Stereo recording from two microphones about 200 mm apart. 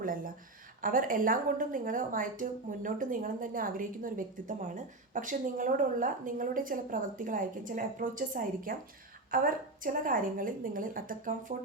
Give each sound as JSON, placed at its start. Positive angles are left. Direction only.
{"t": 0.8, "sound": "a woman's voice", "side_deg": -45}